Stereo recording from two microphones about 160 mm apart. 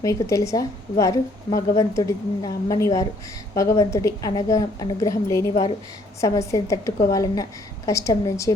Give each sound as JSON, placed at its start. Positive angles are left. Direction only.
{"t": 0.0, "sound": "a woman's voice", "side_deg": 20}